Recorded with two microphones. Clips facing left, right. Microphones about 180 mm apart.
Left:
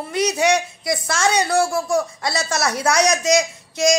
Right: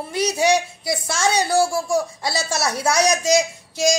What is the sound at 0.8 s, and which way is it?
A woman's voice, centre (ahead or behind).